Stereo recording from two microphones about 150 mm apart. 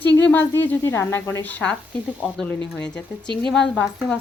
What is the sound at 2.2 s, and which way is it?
Speech, 10° right (ahead or behind).